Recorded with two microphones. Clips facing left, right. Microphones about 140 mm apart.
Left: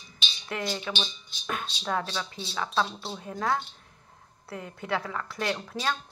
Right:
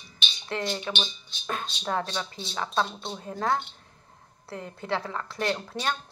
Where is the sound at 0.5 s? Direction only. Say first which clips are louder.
Right 1 dB; 30° right (ahead or behind).